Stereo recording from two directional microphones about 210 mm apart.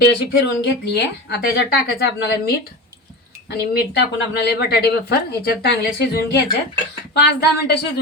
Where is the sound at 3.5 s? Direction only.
50° left (ahead or behind).